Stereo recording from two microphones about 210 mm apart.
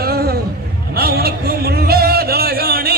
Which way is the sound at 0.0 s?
45° right (ahead or behind).